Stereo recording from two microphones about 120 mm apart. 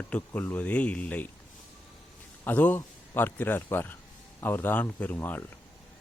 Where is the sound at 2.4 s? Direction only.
15° left (ahead or behind).